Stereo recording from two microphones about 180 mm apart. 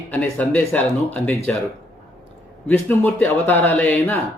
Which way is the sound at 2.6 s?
10° left (ahead or behind).